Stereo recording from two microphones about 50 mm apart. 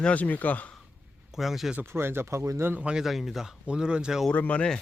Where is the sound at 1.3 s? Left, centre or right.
Centre.